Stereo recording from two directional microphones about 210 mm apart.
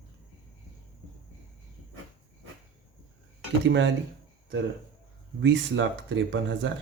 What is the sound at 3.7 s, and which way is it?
Speech, 60° right (ahead or behind).